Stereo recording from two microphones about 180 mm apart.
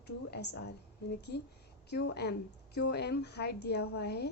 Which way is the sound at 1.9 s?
65° left (ahead or behind).